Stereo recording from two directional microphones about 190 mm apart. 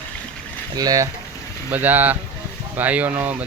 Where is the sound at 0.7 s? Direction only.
20° right (ahead or behind).